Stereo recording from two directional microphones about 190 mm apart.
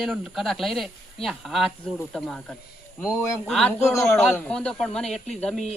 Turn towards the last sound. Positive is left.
turn(degrees=0)  # may be behind; listen again after turning